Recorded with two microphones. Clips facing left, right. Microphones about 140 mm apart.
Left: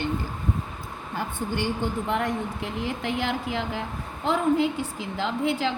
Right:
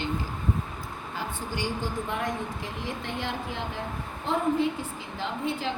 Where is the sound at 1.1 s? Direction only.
60° left (ahead or behind); by 5.7 s 85° left.